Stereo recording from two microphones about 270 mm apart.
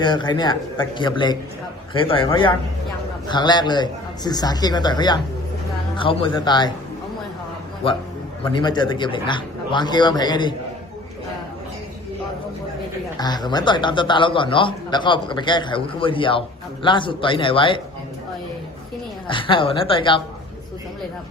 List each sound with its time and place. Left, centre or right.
0.0 s a man's voice: centre
8.4 s a man's voice: centre
13.1 s a man's voice: centre
19.3 s a man's voice: centre